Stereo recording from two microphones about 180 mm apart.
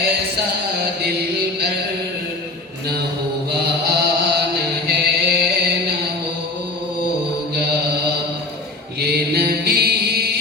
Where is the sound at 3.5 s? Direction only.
65° right (ahead or behind).